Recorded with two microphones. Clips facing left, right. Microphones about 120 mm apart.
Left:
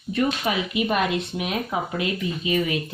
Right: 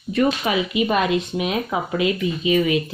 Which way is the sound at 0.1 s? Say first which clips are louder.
Right 4 dB; 90° right.